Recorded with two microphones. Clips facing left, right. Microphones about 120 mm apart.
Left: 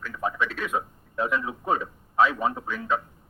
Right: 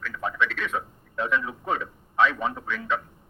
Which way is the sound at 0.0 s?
30° left (ahead or behind).